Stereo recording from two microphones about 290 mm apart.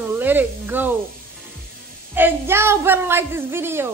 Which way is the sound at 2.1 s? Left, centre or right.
Centre.